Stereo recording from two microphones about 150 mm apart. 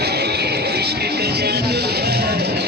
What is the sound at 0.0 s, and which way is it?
Music, 90° right.